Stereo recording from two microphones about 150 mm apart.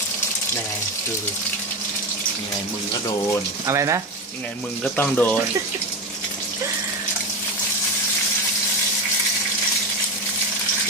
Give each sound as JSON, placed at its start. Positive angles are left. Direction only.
{"t": 3.7, "sound": "speech", "side_deg": -20}
{"t": 4.8, "sound": "speech", "side_deg": 10}